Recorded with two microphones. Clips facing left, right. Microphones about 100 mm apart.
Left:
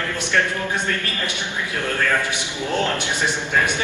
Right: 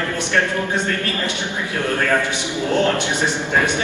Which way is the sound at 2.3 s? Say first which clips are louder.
Right 4 dB; 20° right (ahead or behind).